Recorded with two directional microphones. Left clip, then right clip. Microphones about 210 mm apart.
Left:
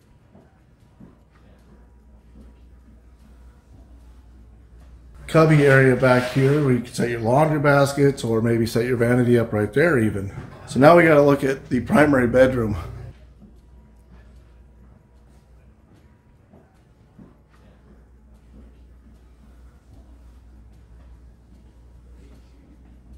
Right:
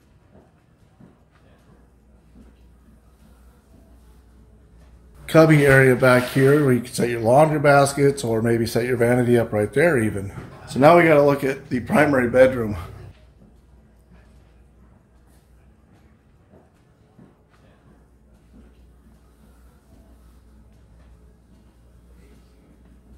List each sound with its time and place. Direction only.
5.2 s speech: 15° right (ahead or behind); by 12.8 s 10° left (ahead or behind)